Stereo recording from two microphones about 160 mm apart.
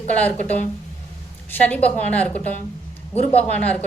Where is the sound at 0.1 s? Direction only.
10° left (ahead or behind).